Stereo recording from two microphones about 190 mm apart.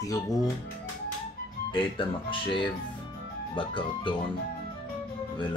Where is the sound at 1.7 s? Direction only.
25° left (ahead or behind).